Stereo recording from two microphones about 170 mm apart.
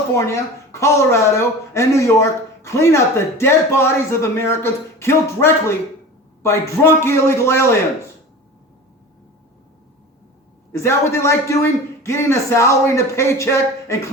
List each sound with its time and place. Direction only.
0.1 s speech: 15° left (ahead or behind)
10.7 s speech: 15° left (ahead or behind)